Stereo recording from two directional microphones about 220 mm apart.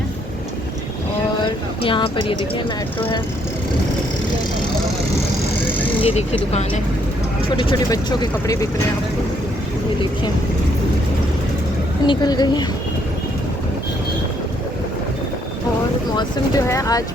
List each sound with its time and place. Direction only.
1.4 s a sound: 20° left (ahead or behind)
6.0 s speech: 30° left (ahead or behind)
12.0 s speech: 20° left (ahead or behind)
16.1 s speech: 15° left (ahead or behind)